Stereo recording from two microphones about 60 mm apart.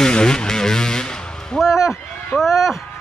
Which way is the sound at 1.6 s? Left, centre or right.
Left.